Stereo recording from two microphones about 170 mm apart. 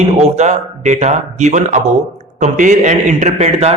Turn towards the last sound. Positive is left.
turn(degrees=-40)  # may be behind; listen again after turning